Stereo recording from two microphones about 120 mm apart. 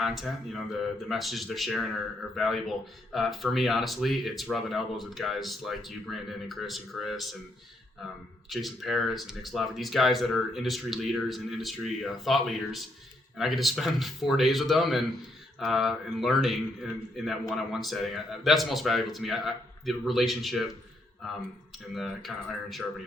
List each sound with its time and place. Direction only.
0.0 s speech: centre (ahead or behind)
8.4 s speech: centre (ahead or behind)
21.9 s speech: centre (ahead or behind)